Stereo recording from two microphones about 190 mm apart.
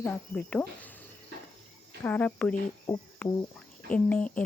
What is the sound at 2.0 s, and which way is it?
Speech, 10° left (ahead or behind).